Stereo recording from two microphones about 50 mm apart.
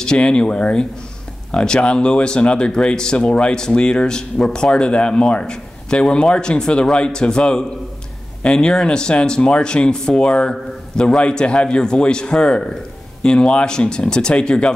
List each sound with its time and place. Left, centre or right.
0.0 s speech: centre